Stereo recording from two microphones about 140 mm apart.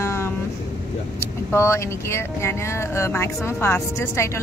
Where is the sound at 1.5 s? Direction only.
20° left (ahead or behind).